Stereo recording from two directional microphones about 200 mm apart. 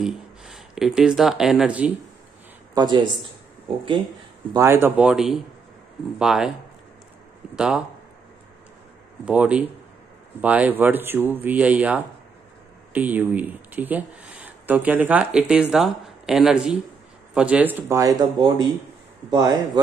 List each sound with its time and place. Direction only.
0.0 s speech: centre (ahead or behind)
2.7 s speech: 20° right (ahead or behind)
4.6 s speech: 10° right (ahead or behind)
7.5 s speech: 5° right (ahead or behind)
9.2 s speech: 5° right (ahead or behind)